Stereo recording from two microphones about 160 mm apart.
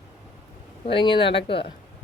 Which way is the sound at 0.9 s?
30° left (ahead or behind).